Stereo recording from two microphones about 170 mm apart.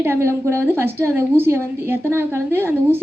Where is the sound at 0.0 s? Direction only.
15° right (ahead or behind).